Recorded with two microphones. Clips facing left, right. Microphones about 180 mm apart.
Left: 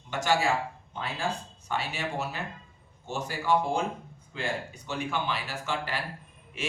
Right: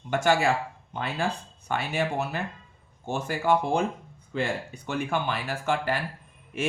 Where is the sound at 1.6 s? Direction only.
55° right (ahead or behind).